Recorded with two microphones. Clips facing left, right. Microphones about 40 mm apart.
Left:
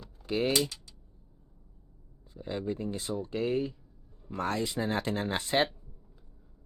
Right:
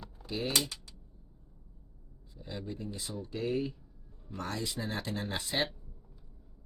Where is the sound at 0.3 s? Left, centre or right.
Left.